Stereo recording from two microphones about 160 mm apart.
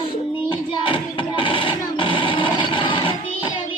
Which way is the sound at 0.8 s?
30° left (ahead or behind).